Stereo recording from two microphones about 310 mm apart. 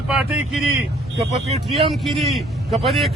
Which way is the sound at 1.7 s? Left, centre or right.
Centre.